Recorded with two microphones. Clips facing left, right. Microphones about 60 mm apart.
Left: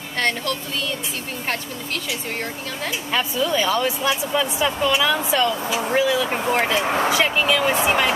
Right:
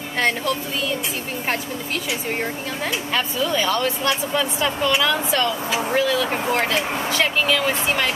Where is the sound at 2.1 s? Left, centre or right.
Centre.